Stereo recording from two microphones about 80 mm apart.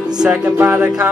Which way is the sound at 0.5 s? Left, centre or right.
Right.